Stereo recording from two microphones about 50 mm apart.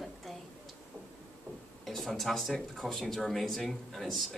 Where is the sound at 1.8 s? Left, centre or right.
Centre.